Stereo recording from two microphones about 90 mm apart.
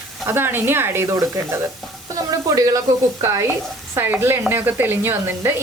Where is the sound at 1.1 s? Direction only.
35° right (ahead or behind).